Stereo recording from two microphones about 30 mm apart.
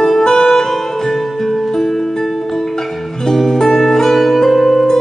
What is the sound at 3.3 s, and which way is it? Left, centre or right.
Music, centre.